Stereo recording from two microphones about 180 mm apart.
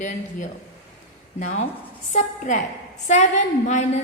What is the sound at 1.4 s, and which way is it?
A woman's voice, 40° left (ahead or behind).